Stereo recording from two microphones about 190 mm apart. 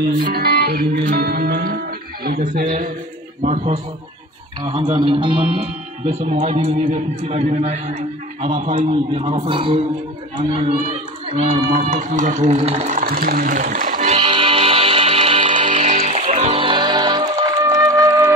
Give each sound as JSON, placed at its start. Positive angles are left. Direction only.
{"t": 0.2, "sound": "music", "side_deg": -55}
{"t": 3.4, "sound": "a man's voice", "side_deg": -35}
{"t": 4.9, "sound": "a man's voice", "side_deg": -25}
{"t": 10.3, "sound": "a sound", "side_deg": -30}